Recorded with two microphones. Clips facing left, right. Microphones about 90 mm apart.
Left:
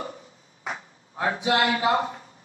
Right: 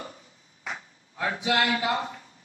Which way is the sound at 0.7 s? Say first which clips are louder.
Left 3 dB; 35° left (ahead or behind).